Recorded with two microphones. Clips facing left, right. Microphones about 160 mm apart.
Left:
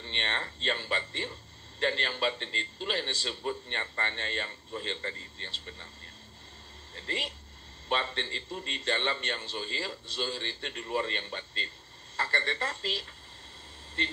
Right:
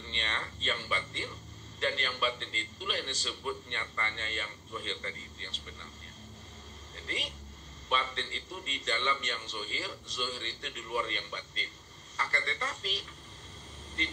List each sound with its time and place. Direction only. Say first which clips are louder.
0.1 s a man's voice: left 2 dB; 35° left (ahead or behind)
7.0 s a man's voice: left 3 dB; 35° left (ahead or behind)